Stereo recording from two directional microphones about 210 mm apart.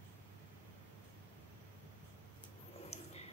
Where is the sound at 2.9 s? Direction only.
30° left (ahead or behind).